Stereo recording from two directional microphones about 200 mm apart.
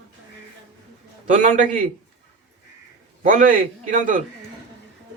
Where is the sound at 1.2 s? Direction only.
40° right (ahead or behind).